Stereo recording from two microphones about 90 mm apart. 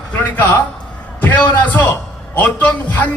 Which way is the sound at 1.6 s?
15° left (ahead or behind).